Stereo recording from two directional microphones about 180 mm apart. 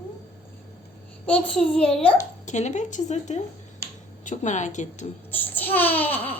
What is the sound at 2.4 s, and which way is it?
Speech, 40° left (ahead or behind).